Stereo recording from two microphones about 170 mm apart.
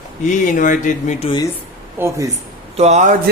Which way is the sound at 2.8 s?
45° right (ahead or behind).